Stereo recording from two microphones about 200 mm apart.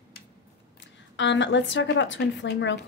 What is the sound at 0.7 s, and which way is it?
A woman's voice, 65° left (ahead or behind).